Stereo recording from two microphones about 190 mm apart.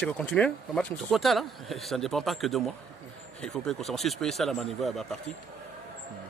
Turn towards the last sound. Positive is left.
turn(degrees=0)  # may be behind; listen again after turning